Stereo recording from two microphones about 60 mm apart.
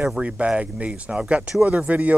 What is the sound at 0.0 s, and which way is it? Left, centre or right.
Speech, centre.